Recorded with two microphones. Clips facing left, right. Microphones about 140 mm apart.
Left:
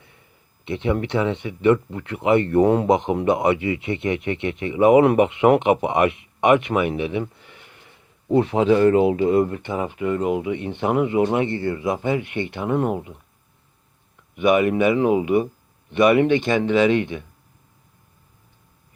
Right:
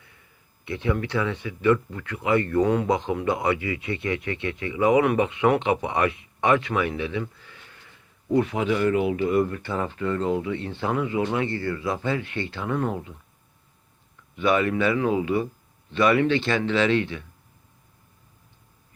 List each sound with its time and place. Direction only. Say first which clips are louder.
0.6 s speech: left 4 dB; 25° left (ahead or behind)
14.3 s speech: left 5 dB; 15° left (ahead or behind)